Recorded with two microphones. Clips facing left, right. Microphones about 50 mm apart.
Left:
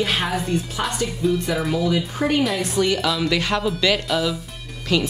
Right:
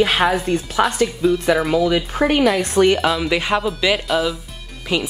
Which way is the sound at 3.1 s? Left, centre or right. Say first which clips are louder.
Right 3 dB; centre.